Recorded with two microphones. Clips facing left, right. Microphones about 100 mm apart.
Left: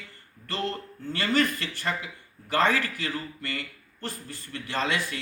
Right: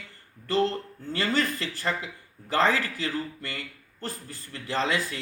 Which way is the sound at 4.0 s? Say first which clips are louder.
Even; 30° right (ahead or behind).